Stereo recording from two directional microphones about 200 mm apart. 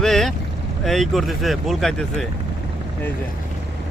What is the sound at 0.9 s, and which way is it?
Speech, centre (ahead or behind).